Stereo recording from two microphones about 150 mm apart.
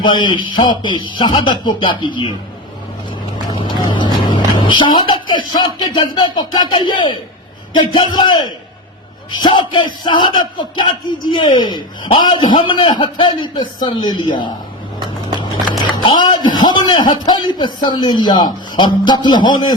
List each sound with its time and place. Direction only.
0.0 s speech: 30° left (ahead or behind)
3.5 s vehicle: 30° left (ahead or behind)
5.0 s music: 30° left (ahead or behind)
5.5 s a man's voice: 30° left (ahead or behind)
16.0 s a man's voice: 30° left (ahead or behind)